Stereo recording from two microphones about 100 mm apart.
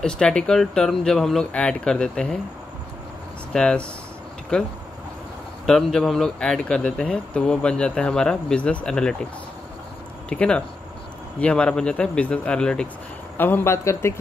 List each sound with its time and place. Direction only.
0.0 s a man's voice: 10° left (ahead or behind)
3.5 s a man's voice: 10° left (ahead or behind)
10.3 s a man's voice: 10° left (ahead or behind)
13.4 s speech: 25° left (ahead or behind)